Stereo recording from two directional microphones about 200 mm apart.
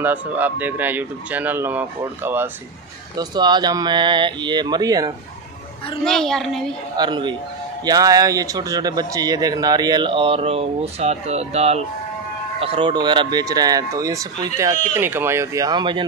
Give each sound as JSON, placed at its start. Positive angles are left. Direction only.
{"t": 0.0, "sound": "speech", "side_deg": -10}
{"t": 3.2, "sound": "speech", "side_deg": -20}
{"t": 6.0, "sound": "a woman's voice", "side_deg": 0}
{"t": 7.0, "sound": "speech", "side_deg": -25}